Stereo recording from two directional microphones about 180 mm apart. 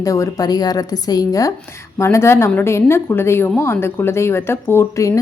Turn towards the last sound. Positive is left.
turn(degrees=15)  # may be behind; listen again after turning